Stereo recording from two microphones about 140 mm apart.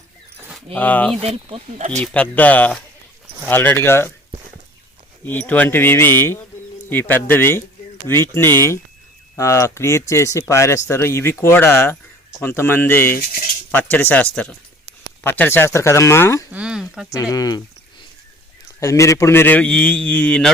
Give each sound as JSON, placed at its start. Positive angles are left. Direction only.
{"t": 0.7, "sound": "a man's voice", "side_deg": 10}
{"t": 1.2, "sound": "speech", "side_deg": -45}
{"t": 2.1, "sound": "a man's voice", "side_deg": 10}
{"t": 5.2, "sound": "a man's voice", "side_deg": 15}
{"t": 16.5, "sound": "speech", "side_deg": -5}
{"t": 17.3, "sound": "speech", "side_deg": 25}
{"t": 18.8, "sound": "a man's voice", "side_deg": 20}